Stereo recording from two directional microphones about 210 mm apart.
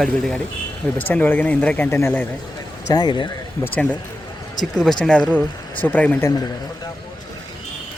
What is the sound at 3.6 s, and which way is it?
Speech, 5° left (ahead or behind).